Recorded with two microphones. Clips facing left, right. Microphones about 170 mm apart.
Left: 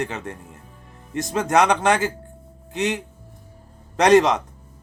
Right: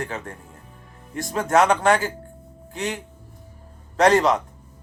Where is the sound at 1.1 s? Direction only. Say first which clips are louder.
Even; 20° left (ahead or behind).